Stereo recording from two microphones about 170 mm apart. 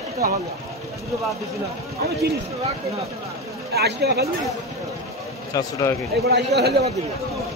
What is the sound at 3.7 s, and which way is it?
Speech, 70° right (ahead or behind).